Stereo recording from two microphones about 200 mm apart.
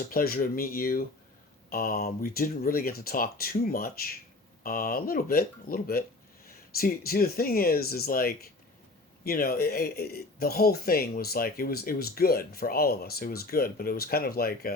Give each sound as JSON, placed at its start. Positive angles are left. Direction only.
{"t": 0.0, "sound": "speech", "side_deg": 45}